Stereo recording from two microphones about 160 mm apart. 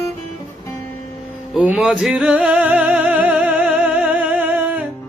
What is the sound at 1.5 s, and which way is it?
Music, 5° right (ahead or behind).